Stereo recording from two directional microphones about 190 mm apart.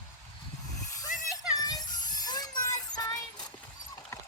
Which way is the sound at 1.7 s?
20° left (ahead or behind).